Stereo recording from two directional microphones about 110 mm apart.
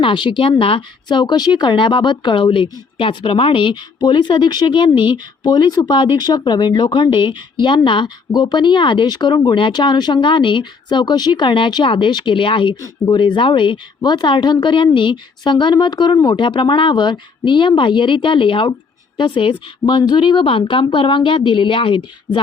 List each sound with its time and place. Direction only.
0.0 s a woman's voice: 45° left (ahead or behind)